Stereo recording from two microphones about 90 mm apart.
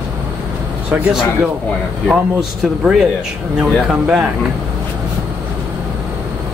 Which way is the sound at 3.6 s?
10° right (ahead or behind).